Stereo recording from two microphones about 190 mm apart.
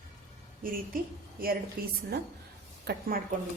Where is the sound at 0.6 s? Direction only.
50° right (ahead or behind).